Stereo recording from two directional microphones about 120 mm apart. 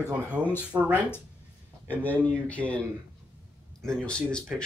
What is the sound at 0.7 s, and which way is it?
Speech, 15° right (ahead or behind).